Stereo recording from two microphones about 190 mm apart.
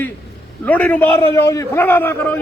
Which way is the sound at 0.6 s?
10° left (ahead or behind).